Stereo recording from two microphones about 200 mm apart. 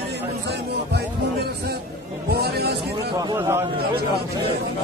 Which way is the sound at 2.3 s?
50° right (ahead or behind).